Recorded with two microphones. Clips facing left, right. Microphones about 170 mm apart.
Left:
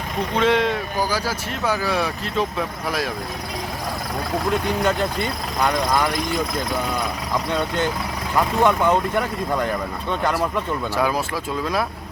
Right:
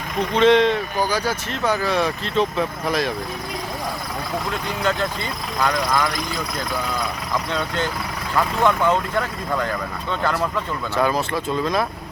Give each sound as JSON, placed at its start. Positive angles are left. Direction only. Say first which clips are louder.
{"t": 0.3, "sound": "speech", "louder": "right 4 dB", "side_deg": 5}
{"t": 5.5, "sound": "speech", "louder": "left 1 dB", "side_deg": 15}
{"t": 8.4, "sound": "speech", "louder": "left 1 dB", "side_deg": 15}